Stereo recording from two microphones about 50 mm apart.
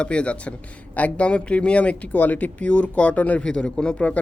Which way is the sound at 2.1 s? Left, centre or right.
Left.